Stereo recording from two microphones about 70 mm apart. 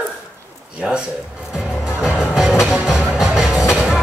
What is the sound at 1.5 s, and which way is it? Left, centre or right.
Music, centre.